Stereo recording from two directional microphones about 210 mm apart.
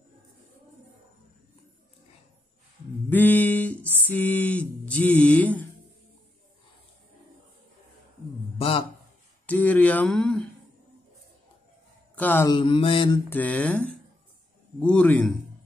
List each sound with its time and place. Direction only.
3.1 s mantra: 10° left (ahead or behind)
4.0 s speech: 5° left (ahead or behind)
8.5 s a sound: 25° left (ahead or behind)
9.5 s a sound: 5° left (ahead or behind)
12.2 s speech: 10° left (ahead or behind)
12.5 s mantra: 25° left (ahead or behind)
13.3 s a man's voice: 5° left (ahead or behind)